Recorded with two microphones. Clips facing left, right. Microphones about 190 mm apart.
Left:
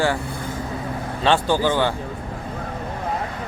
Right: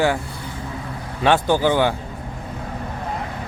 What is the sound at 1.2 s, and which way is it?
Speech, 15° right (ahead or behind).